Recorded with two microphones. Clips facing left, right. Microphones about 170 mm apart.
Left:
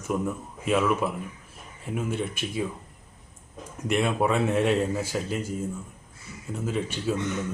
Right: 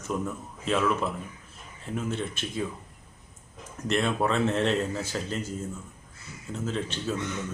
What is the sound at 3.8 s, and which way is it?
Speech, 10° left (ahead or behind).